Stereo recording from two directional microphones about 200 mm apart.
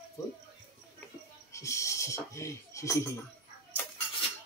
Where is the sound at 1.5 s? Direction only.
15° left (ahead or behind).